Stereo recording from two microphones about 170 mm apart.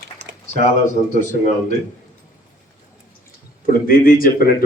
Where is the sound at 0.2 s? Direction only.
85° right.